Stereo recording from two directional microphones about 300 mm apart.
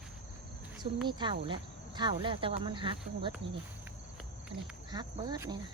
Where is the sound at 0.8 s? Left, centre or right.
Centre.